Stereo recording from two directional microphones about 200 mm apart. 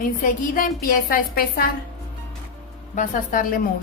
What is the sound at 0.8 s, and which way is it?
Speech, 45° left (ahead or behind).